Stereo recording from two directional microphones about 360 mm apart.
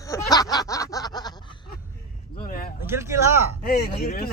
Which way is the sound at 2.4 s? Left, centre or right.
Left.